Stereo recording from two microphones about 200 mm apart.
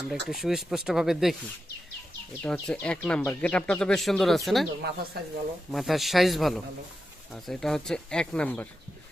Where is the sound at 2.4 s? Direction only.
5° left (ahead or behind).